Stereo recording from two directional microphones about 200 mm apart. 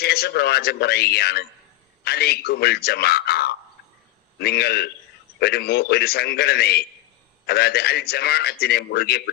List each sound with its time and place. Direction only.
0.0 s a man's voice: 55° left (ahead or behind)